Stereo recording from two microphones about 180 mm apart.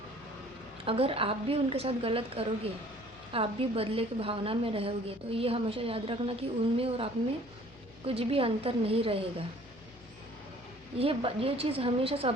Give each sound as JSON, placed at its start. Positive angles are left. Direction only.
{"t": 0.9, "sound": "a woman's voice", "side_deg": -30}
{"t": 10.9, "sound": "a woman's voice", "side_deg": -30}